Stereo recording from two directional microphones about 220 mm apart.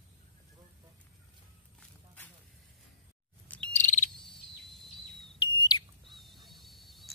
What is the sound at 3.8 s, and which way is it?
Bird vocalization, 35° left (ahead or behind).